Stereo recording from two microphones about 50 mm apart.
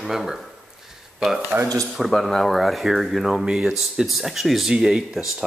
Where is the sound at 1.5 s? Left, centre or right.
Right.